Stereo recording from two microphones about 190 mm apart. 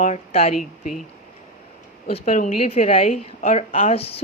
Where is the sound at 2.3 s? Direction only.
40° left (ahead or behind).